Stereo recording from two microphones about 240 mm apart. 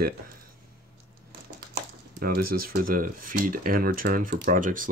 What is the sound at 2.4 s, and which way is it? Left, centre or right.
Speech, right.